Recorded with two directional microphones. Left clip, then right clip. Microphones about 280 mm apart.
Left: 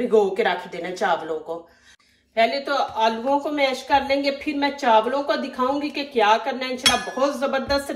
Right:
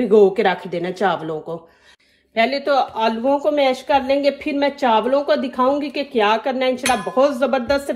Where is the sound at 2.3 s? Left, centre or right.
Right.